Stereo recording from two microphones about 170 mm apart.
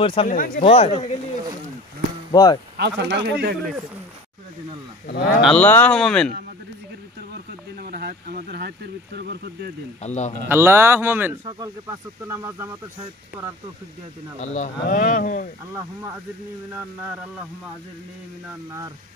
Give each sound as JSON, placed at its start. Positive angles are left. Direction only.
{"t": 0.0, "sound": "speech", "side_deg": 30}
{"t": 2.3, "sound": "speech", "side_deg": 25}
{"t": 2.8, "sound": "speech", "side_deg": -80}
{"t": 5.0, "sound": "speech", "side_deg": 60}
{"t": 5.4, "sound": "speech", "side_deg": 5}
{"t": 7.8, "sound": "a sound", "side_deg": -60}
{"t": 10.0, "sound": "speech", "side_deg": 45}
{"t": 10.5, "sound": "speech", "side_deg": -15}
{"t": 14.4, "sound": "speech", "side_deg": 40}
{"t": 15.7, "sound": "speech", "side_deg": -15}